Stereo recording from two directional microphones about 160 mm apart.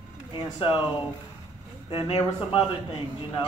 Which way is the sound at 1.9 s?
35° left (ahead or behind).